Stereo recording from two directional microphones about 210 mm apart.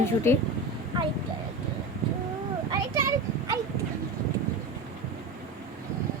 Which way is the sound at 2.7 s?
15° right (ahead or behind).